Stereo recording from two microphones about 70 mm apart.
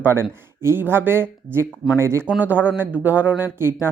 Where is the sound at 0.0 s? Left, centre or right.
Right.